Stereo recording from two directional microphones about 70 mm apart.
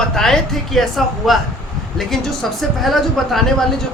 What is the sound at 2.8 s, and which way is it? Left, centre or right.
Speech, centre.